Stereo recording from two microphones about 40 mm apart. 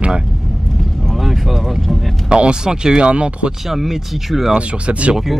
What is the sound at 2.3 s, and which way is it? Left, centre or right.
Speech, right.